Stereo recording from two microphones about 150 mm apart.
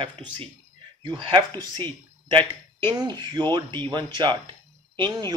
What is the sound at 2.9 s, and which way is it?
Speech, 30° right (ahead or behind).